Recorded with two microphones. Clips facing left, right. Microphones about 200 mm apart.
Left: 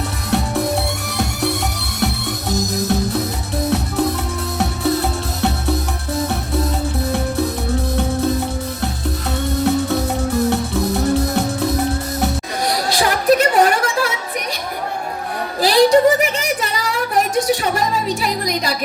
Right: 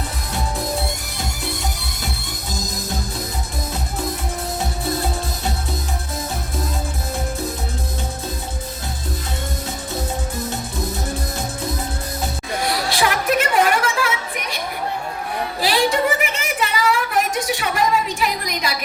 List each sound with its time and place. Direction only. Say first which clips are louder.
0.3 s music: left 9 dB; 65° left (ahead or behind)
2.5 s music: left 9 dB; 70° left (ahead or behind)
7.1 s music: left 5 dB; 65° left (ahead or behind)
9.6 s music: left 11 dB; 65° left (ahead or behind)
12.6 s a sound: left 2 dB; 40° left (ahead or behind)
15.6 s a sound: left 8 dB; 40° left (ahead or behind)